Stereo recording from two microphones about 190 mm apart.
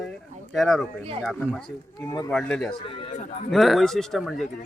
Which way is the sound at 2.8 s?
30° left (ahead or behind).